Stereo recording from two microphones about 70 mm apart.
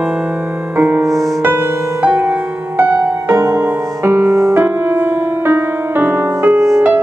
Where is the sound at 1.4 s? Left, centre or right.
Right.